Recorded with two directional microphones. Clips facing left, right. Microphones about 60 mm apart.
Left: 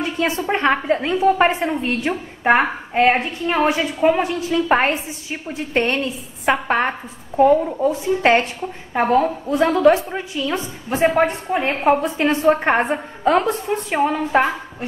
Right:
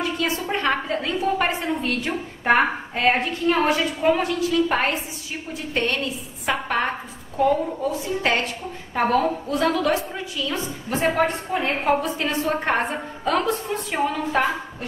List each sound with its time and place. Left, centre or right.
0.2 s a woman's voice: left
8.9 s a woman's voice: centre